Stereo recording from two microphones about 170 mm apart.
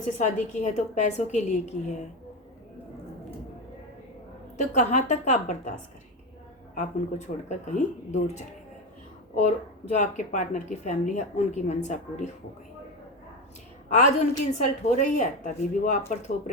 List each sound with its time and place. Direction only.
0.2 s a woman's voice: 45° left (ahead or behind)
4.5 s a woman's voice: 45° left (ahead or behind)
6.7 s a woman's voice: 45° left (ahead or behind)
9.9 s a woman's voice: 45° left (ahead or behind)
13.9 s a woman's voice: 45° left (ahead or behind)